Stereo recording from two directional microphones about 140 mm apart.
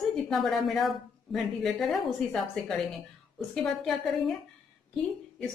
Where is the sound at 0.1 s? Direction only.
Centre (ahead or behind).